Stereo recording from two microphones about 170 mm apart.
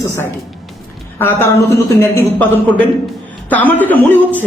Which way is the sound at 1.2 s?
15° left (ahead or behind).